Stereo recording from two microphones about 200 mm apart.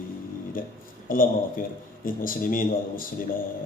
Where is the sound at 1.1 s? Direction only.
45° left (ahead or behind).